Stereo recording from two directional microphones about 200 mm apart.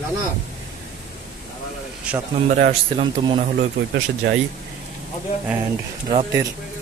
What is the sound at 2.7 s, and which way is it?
Speech, 30° right (ahead or behind).